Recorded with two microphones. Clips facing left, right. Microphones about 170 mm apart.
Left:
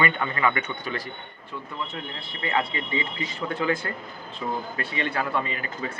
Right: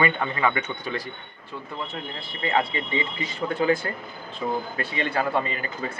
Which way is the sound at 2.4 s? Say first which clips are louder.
Right 2 dB; 30° right (ahead or behind).